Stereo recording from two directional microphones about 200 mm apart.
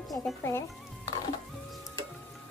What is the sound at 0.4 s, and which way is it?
Speech, 15° left (ahead or behind).